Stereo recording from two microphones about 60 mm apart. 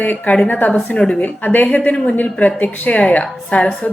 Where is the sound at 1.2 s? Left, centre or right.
Left.